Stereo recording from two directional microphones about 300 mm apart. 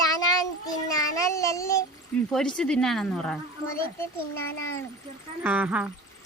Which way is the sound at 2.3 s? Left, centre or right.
Centre.